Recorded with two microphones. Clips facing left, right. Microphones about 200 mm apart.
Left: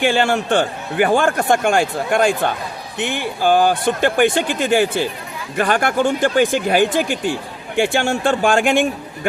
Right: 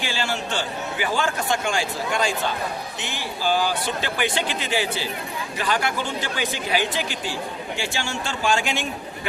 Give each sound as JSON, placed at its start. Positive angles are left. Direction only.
{"t": 0.0, "sound": "a man's voice", "side_deg": 55}